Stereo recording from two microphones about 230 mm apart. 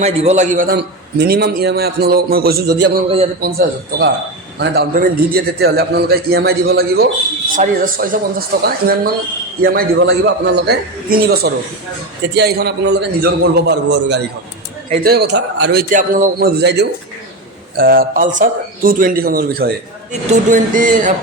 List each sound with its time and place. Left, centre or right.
0.0 s a man's voice: right